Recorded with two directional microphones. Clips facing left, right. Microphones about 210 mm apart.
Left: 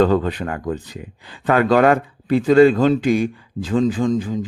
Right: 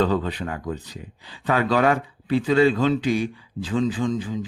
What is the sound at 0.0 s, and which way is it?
Speech, 50° left (ahead or behind).